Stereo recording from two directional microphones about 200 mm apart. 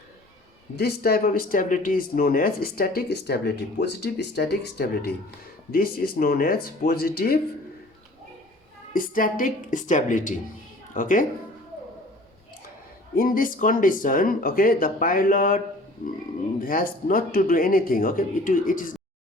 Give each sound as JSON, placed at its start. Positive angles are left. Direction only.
{"t": 0.8, "sound": "speech", "side_deg": 50}
{"t": 8.9, "sound": "speech", "side_deg": 45}
{"t": 13.1, "sound": "speech", "side_deg": 45}